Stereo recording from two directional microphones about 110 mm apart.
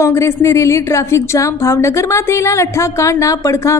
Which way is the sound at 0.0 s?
25° left (ahead or behind).